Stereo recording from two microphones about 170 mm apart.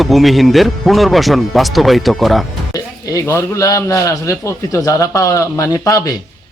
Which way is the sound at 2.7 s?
20° left (ahead or behind).